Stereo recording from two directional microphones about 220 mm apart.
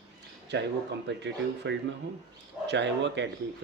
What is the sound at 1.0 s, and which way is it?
Speech, 55° right (ahead or behind).